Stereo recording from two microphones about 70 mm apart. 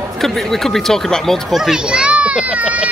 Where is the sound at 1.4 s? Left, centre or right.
Centre.